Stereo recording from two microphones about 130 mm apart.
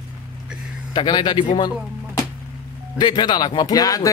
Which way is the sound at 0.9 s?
35° left (ahead or behind).